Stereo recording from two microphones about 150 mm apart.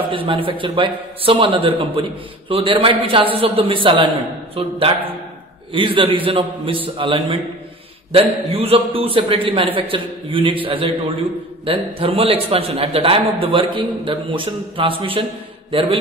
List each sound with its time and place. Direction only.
0.1 s a man's voice: 35° right (ahead or behind)